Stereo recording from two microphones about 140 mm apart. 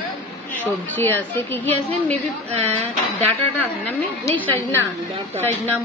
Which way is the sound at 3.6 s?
10° left (ahead or behind).